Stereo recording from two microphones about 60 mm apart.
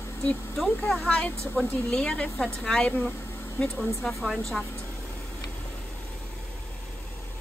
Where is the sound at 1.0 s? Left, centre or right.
Centre.